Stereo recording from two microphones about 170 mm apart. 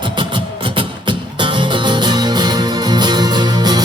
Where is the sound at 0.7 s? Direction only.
30° right (ahead or behind).